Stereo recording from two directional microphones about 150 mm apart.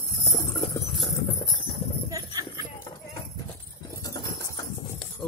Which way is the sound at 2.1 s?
20° right (ahead or behind).